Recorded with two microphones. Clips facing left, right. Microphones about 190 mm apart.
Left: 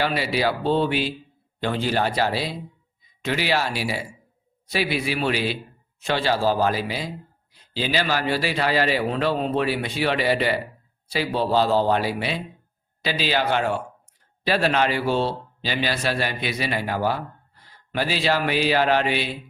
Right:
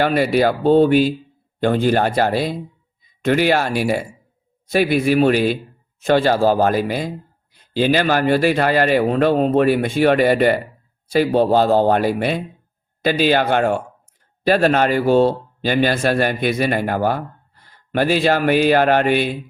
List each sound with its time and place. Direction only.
0.0 s a man's voice: 50° right (ahead or behind)